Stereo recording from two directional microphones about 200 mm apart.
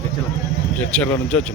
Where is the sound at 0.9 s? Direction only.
5° left (ahead or behind).